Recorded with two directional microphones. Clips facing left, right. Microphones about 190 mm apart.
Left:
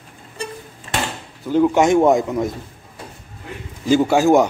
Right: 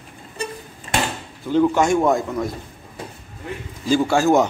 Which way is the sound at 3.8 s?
15° left (ahead or behind).